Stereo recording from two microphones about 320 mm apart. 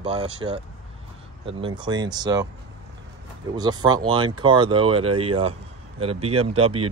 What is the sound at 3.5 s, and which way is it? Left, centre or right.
Speech, centre.